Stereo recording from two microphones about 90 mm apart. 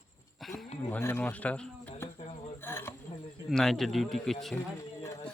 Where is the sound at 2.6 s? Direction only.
30° left (ahead or behind).